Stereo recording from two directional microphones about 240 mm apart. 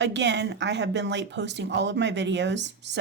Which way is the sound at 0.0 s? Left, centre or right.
Right.